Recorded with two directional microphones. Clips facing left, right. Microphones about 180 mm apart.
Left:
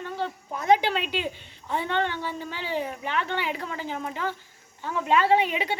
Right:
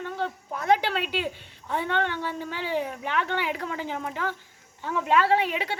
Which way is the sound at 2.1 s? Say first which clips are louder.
Right 1 dB; 10° left (ahead or behind).